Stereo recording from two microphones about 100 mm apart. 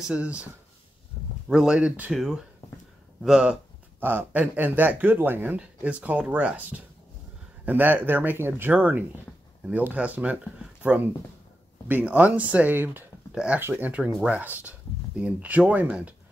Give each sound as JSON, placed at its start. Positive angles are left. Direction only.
{"t": 0.0, "sound": "speech", "side_deg": -10}
{"t": 1.1, "sound": "a sound", "side_deg": 0}
{"t": 1.5, "sound": "speech", "side_deg": -5}
{"t": 4.0, "sound": "speech", "side_deg": -20}
{"t": 13.3, "sound": "speech", "side_deg": -10}
{"t": 13.6, "sound": "speech", "side_deg": -20}